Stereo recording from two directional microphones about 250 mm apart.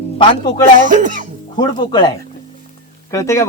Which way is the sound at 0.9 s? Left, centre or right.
Right.